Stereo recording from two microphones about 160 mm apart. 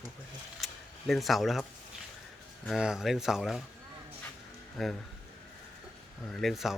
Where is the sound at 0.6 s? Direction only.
Centre (ahead or behind).